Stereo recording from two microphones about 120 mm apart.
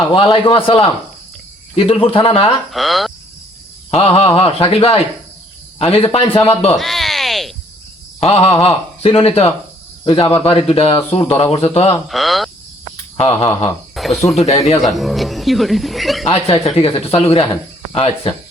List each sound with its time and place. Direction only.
0.1 s speech: 45° left (ahead or behind)
2.7 s speech: centre (ahead or behind)
3.9 s speech: 55° left (ahead or behind)
6.7 s a sound: centre (ahead or behind)
8.2 s speech: 55° left (ahead or behind)
10.0 s speech: 40° left (ahead or behind)
12.0 s speech: centre (ahead or behind)
13.2 s speech: 55° left (ahead or behind)
14.0 s a sound: centre (ahead or behind)
14.3 s speech: 60° left (ahead or behind)
14.9 s speech: centre (ahead or behind)
16.2 s speech: 55° left (ahead or behind)